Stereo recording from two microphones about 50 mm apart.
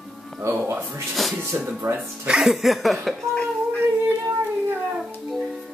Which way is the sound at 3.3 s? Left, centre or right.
Left.